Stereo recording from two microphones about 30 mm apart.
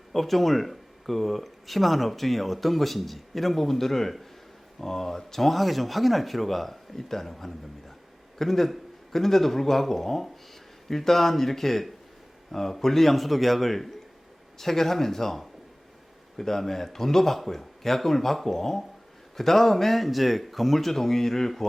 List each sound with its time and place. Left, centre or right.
0.1 s speech: centre